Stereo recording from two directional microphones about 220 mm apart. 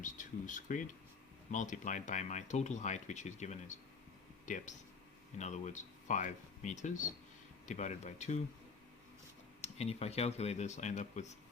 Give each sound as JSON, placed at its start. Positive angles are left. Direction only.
{"t": 0.0, "sound": "speech", "side_deg": 35}
{"t": 9.6, "sound": "speech", "side_deg": 30}